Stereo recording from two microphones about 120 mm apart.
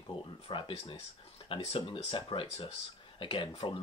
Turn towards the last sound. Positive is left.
turn(degrees=45)  # may be behind; listen again after turning